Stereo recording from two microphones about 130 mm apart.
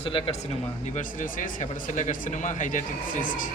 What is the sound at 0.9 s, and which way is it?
Speech, 85° left.